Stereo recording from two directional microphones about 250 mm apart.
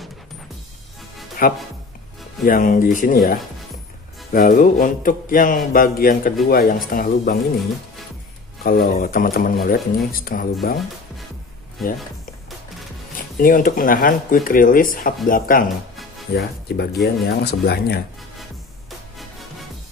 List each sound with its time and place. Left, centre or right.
1.4 s speech: left
4.3 s speech: left
8.6 s speech: left
11.8 s speech: centre
13.1 s speech: left